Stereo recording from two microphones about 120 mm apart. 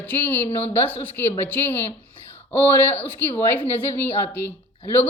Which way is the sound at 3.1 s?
15° left (ahead or behind).